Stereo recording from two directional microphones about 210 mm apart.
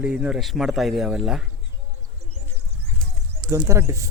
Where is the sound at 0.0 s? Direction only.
5° right (ahead or behind).